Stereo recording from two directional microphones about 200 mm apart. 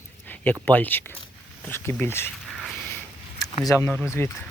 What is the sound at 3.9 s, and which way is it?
Speech, 5° left (ahead or behind).